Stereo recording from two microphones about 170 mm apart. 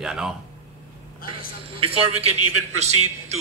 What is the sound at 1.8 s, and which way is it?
A man's voice, 35° right (ahead or behind).